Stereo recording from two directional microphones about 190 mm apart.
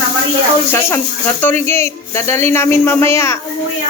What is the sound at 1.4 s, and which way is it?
Speech, 10° left (ahead or behind).